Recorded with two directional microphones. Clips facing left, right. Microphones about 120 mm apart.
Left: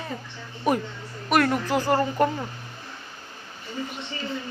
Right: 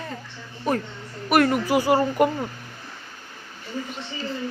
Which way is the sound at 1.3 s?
5° right (ahead or behind).